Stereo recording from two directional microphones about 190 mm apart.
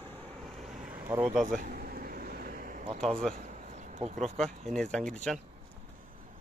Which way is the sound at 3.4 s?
40° right (ahead or behind).